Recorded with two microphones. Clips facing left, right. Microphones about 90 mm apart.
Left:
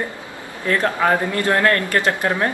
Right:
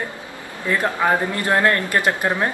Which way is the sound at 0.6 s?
15° right (ahead or behind).